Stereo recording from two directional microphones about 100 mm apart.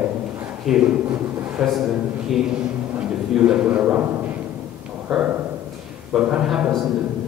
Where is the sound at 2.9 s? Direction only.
10° right (ahead or behind).